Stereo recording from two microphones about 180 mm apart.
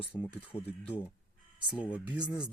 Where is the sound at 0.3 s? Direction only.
35° left (ahead or behind).